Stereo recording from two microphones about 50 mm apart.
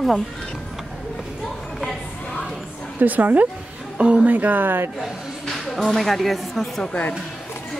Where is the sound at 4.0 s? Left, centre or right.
Right.